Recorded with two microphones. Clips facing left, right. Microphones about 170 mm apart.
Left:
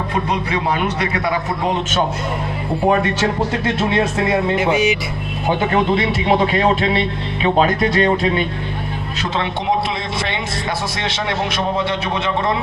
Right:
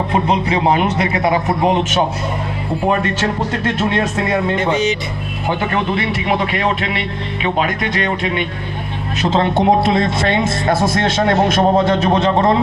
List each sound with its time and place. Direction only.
0.1 s a man's voice: 25° right (ahead or behind)
3.6 s speech: 5° left (ahead or behind)
5.5 s a man's voice: 20° left (ahead or behind)
9.4 s speech: 50° right (ahead or behind)